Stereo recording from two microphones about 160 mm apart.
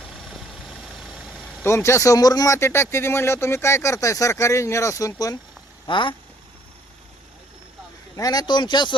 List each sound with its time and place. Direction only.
0.6 s vehicle: centre (ahead or behind)
1.6 s speech: 15° left (ahead or behind)
5.8 s speech: 30° left (ahead or behind)
8.1 s speech: 25° left (ahead or behind)